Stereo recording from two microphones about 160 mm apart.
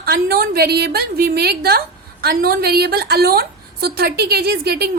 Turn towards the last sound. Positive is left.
turn(degrees=-85)